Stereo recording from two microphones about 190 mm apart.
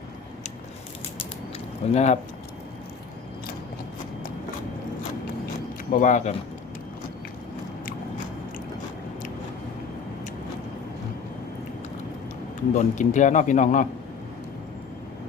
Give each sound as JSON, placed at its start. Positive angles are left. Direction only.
{"t": 1.9, "sound": "a man's voice", "side_deg": 35}
{"t": 5.9, "sound": "a man's voice", "side_deg": 40}
{"t": 12.7, "sound": "a man's voice", "side_deg": 40}